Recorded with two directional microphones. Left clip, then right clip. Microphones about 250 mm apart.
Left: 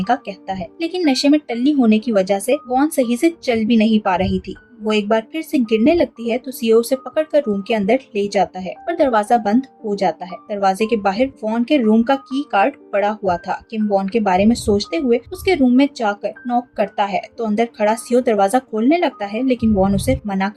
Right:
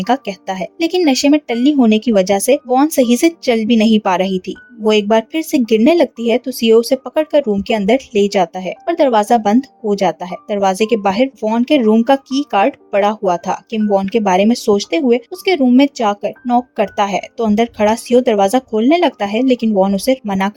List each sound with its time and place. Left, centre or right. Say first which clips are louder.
0.0 s speech: right 3 dB; right